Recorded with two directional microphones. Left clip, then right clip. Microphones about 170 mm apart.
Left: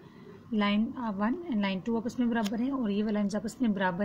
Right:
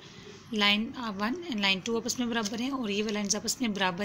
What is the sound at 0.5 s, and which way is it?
A woman's voice, 30° left (ahead or behind).